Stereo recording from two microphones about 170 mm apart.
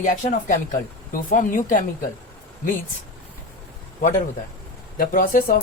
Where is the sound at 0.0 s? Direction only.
50° left (ahead or behind).